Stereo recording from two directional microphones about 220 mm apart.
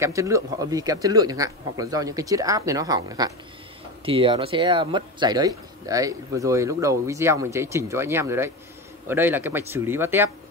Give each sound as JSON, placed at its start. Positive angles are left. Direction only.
{"t": 0.0, "sound": "speech", "side_deg": -15}